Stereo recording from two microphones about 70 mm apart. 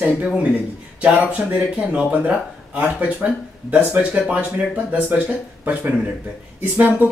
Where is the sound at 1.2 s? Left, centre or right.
Centre.